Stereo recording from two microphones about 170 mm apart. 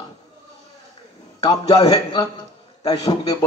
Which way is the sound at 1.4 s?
20° left (ahead or behind).